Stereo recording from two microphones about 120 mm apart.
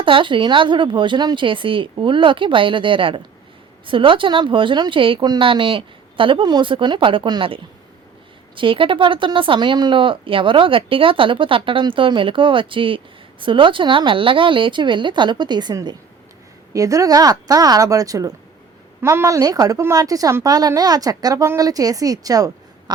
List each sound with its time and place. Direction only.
0.0 s a woman's voice: 45° right (ahead or behind)